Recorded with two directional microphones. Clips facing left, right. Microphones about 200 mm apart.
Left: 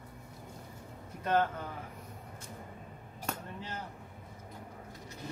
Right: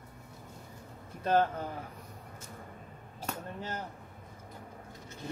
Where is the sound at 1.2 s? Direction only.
30° right (ahead or behind).